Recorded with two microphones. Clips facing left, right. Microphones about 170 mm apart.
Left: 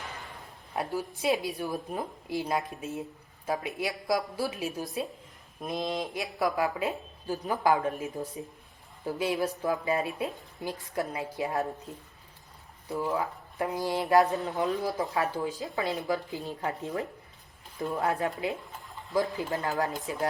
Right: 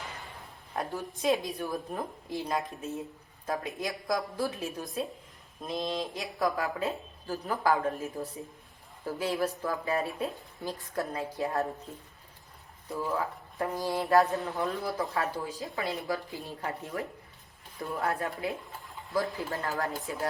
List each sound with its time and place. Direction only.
1.5 s a woman's voice: 15° left (ahead or behind); by 5.0 s centre (ahead or behind)
5.6 s a woman's voice: 15° left (ahead or behind)
12.9 s a woman's voice: 15° left (ahead or behind)